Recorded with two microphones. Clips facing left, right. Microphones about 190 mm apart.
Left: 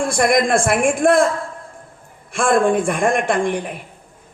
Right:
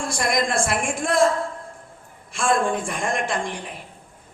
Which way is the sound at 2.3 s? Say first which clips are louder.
Left 6 dB; 55° left (ahead or behind).